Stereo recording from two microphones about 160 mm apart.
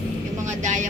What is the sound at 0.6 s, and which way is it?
Vehicle, 50° right (ahead or behind).